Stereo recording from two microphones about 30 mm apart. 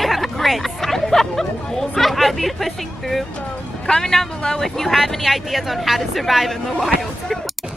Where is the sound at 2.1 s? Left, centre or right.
Centre.